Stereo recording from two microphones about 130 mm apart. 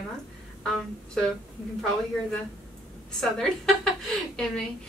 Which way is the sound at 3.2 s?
5° left (ahead or behind).